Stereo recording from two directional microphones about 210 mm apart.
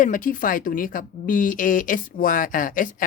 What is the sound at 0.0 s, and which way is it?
A woman's voice, 40° left (ahead or behind).